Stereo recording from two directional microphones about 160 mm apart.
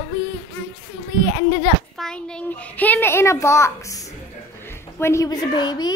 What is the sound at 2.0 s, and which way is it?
A child's voice, 5° left (ahead or behind).